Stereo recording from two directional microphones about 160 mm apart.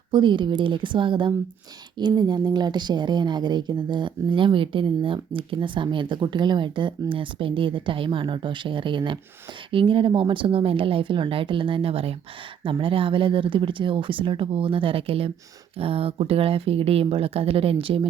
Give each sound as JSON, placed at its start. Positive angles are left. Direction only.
{"t": 0.1, "sound": "speech", "side_deg": -30}